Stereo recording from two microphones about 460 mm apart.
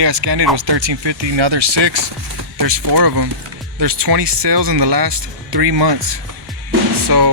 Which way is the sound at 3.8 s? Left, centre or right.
Right.